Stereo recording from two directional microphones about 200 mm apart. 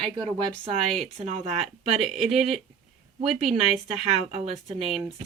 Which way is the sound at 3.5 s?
30° right (ahead or behind).